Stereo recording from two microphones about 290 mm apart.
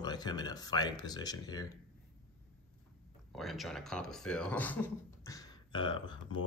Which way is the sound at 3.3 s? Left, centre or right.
Centre.